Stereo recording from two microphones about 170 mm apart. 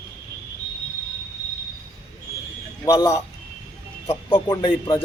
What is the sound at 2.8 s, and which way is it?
A man's voice, 20° left (ahead or behind).